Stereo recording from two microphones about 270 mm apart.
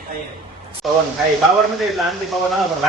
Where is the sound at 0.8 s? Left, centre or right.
Centre.